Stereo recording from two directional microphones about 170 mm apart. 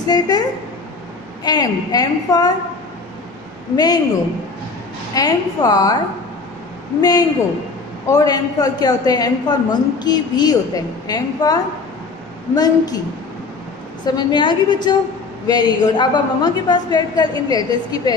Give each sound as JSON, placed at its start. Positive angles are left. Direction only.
{"t": 0.0, "sound": "a woman's voice", "side_deg": 25}
{"t": 3.7, "sound": "a woman's voice", "side_deg": 25}
{"t": 5.1, "sound": "a woman's voice", "side_deg": 20}
{"t": 7.0, "sound": "a woman's voice", "side_deg": 20}
{"t": 14.0, "sound": "a woman's voice", "side_deg": 25}